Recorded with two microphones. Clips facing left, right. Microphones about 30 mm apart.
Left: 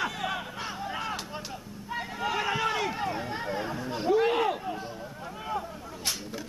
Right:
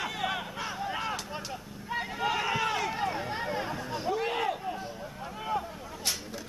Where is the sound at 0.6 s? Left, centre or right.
Centre.